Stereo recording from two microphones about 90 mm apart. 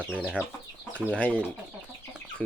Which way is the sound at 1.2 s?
15° left (ahead or behind).